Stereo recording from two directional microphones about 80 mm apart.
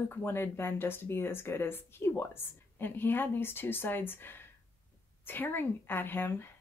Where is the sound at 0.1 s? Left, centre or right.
Left.